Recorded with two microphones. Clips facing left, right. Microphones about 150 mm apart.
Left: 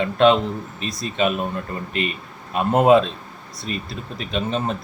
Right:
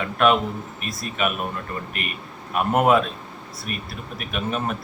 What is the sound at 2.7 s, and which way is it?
Speech, 30° left (ahead or behind).